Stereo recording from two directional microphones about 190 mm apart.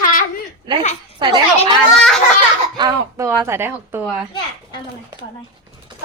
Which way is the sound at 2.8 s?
15° right (ahead or behind).